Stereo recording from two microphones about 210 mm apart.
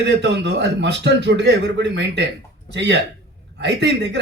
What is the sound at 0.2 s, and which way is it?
A man's voice, 55° right (ahead or behind).